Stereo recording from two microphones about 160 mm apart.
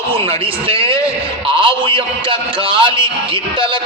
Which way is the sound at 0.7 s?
35° right (ahead or behind).